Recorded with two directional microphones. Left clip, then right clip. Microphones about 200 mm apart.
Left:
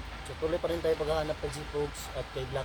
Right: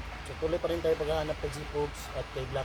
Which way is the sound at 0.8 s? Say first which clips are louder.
Even; 25° left (ahead or behind).